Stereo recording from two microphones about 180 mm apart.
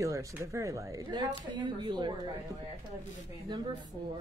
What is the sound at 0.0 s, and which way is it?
Speech, 15° right (ahead or behind).